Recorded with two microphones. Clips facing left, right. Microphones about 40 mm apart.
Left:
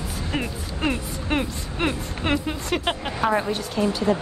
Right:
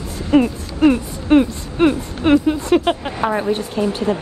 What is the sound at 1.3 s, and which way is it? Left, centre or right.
Speech, centre.